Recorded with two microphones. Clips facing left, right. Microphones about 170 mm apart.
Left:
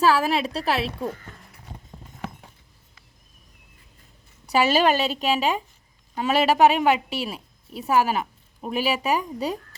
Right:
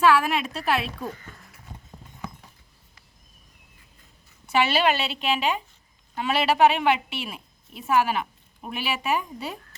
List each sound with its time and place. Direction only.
0.0 s a woman's voice: 35° left (ahead or behind)
4.4 s a woman's voice: 40° left (ahead or behind)